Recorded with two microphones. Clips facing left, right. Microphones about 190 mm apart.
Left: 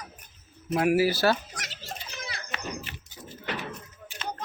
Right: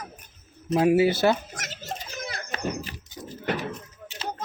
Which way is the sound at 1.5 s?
45° right (ahead or behind).